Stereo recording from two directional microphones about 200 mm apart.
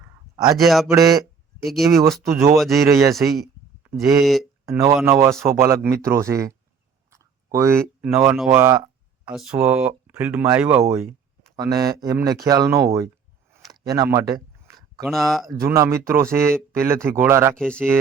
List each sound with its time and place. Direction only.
0.6 s speech: centre (ahead or behind)
0.9 s speech: 15° right (ahead or behind)
1.6 s speech: centre (ahead or behind)
2.8 s speech: 15° right (ahead or behind)
3.2 s speech: centre (ahead or behind)
4.6 s speech: 15° right (ahead or behind)
7.1 s a sound: 15° right (ahead or behind)
8.4 s speech: 15° right (ahead or behind)
9.2 s speech: 5° right (ahead or behind)
15.0 s speech: centre (ahead or behind)
15.4 s speech: 15° right (ahead or behind)
17.6 s speech: 5° left (ahead or behind)